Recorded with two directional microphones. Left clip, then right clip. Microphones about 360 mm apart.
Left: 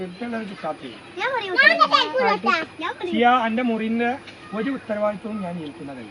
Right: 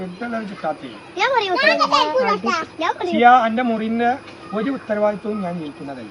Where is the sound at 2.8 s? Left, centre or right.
Centre.